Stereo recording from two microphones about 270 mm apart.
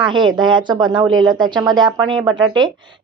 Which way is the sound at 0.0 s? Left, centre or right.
Centre.